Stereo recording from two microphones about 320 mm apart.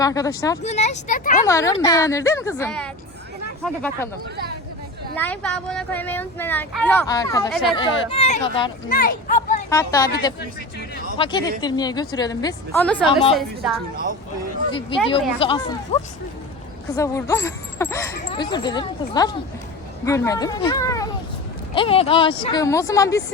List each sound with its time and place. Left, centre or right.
0.0 s speech: centre
0.7 s speech: left
1.5 s speech: centre
5.1 s speech: centre
8.9 s a sound: left
9.6 s speech: centre
15.4 s speech: centre